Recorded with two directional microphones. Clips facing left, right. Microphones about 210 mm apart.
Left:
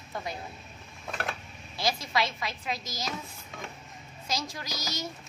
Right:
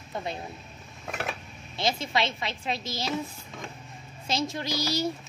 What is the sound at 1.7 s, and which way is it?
Speech, 25° right (ahead or behind).